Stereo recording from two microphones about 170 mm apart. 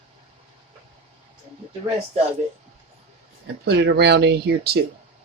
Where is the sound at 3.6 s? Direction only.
80° right.